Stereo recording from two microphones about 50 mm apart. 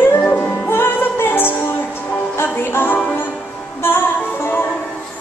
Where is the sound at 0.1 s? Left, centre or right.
Left.